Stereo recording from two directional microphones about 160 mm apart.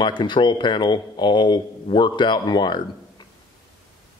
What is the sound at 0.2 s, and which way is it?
Speech, 30° left (ahead or behind).